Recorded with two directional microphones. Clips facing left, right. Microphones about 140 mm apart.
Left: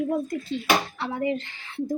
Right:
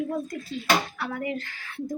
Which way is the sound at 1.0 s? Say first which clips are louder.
Left 4 dB; 25° left (ahead or behind).